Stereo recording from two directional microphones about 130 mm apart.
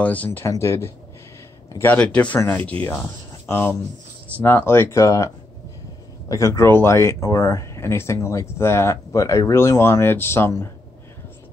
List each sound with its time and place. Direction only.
0.0 s speech: 10° left (ahead or behind)